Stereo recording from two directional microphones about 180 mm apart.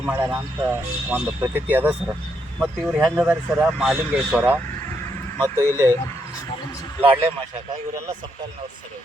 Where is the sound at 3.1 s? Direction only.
10° right (ahead or behind).